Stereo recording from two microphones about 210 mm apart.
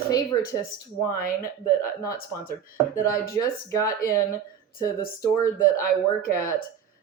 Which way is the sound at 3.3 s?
15° left (ahead or behind).